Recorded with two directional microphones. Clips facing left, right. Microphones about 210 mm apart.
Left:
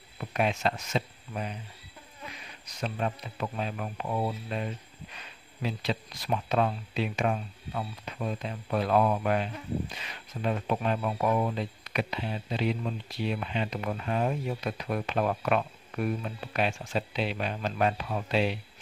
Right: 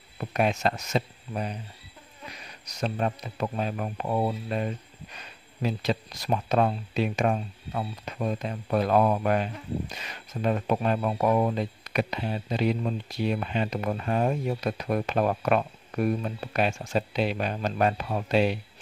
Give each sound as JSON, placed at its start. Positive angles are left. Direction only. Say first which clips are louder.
{"t": 0.2, "sound": "speech", "louder": "right 3 dB", "side_deg": -40}